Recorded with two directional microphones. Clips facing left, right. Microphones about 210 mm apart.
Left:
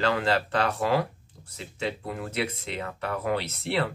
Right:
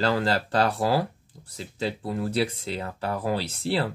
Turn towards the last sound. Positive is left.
turn(degrees=-30)  # may be behind; listen again after turning